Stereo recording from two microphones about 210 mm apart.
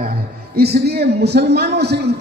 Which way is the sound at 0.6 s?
50° right (ahead or behind).